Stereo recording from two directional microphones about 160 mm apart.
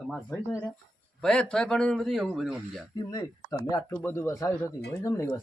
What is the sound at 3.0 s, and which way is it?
Speech, 25° left (ahead or behind).